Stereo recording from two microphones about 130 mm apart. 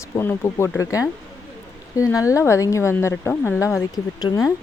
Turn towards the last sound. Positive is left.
turn(degrees=30)  # may be behind; listen again after turning